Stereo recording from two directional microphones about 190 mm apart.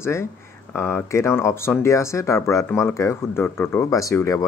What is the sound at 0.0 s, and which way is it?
Speech, 15° left (ahead or behind).